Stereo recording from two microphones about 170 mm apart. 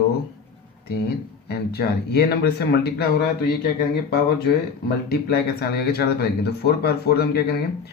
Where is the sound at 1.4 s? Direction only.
70° left (ahead or behind).